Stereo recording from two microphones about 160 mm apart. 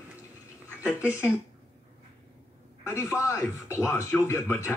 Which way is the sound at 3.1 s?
15° left (ahead or behind).